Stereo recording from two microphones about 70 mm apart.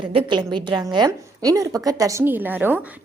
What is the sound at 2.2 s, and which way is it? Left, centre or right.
Speech, right.